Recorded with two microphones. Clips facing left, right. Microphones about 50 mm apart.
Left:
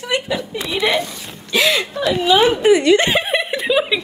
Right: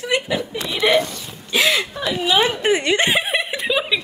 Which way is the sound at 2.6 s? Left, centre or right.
Right.